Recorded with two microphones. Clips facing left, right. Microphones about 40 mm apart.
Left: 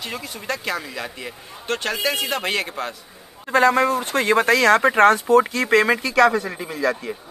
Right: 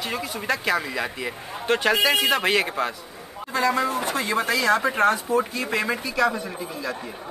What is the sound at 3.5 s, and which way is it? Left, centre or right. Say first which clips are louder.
Speech: left 6 dB; left.